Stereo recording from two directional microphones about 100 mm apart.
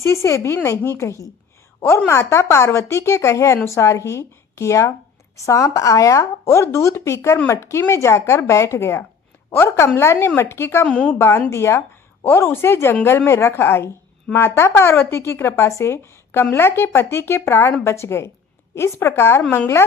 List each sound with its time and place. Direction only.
0.0 s speech: 25° left (ahead or behind)
2.0 s speech: 25° left (ahead or behind)
10.8 s a woman's voice: 10° left (ahead or behind)
11.2 s speech: 25° left (ahead or behind)